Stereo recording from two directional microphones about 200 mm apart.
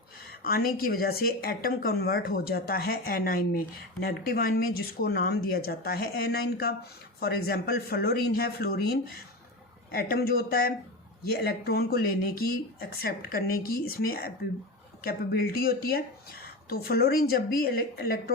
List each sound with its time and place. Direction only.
0.4 s speech: 50° left (ahead or behind)